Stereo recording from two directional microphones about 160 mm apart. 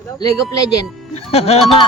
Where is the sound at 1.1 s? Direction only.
40° left (ahead or behind).